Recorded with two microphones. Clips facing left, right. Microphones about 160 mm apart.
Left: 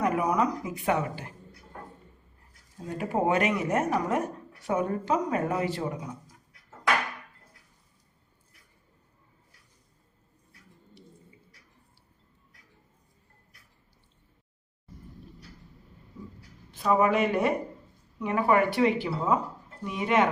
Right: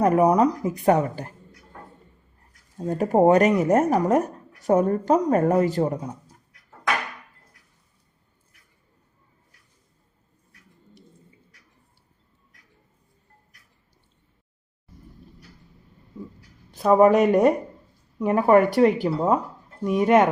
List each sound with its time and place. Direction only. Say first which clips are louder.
0.0 s speech: right 8 dB; 40° right (ahead or behind)
2.7 s speech: right 9 dB; 40° right (ahead or behind)
16.7 s speech: right 8 dB; 40° right (ahead or behind)